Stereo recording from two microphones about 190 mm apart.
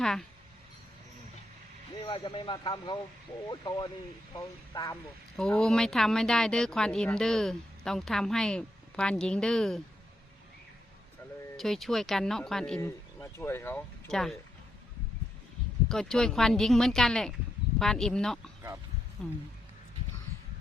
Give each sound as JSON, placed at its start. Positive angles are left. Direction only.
{"t": 0.0, "sound": "speech", "side_deg": 0}
{"t": 2.0, "sound": "speech", "side_deg": 25}
{"t": 5.4, "sound": "speech", "side_deg": 5}
{"t": 11.5, "sound": "speech", "side_deg": 0}
{"t": 15.9, "sound": "speech", "side_deg": 0}